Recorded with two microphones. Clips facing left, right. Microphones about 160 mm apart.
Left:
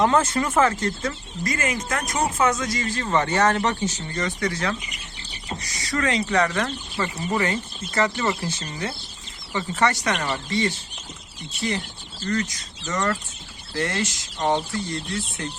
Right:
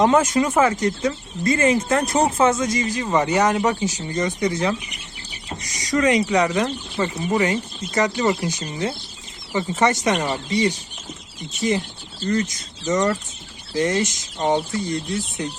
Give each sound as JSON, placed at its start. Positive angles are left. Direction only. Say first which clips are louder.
{"t": 0.0, "sound": "speech", "louder": "right 3 dB", "side_deg": -15}
{"t": 1.5, "sound": "speech", "louder": "right 9 dB", "side_deg": -30}
{"t": 12.2, "sound": "speech", "louder": "right 4 dB", "side_deg": -20}